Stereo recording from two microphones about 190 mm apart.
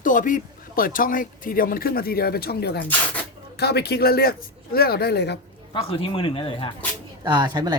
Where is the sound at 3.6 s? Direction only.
60° left (ahead or behind).